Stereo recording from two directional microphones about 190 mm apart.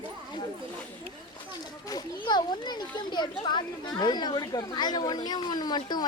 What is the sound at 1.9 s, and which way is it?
Speech, 25° left (ahead or behind).